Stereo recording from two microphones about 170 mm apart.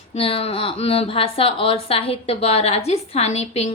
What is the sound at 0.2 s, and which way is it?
Speech, 35° left (ahead or behind).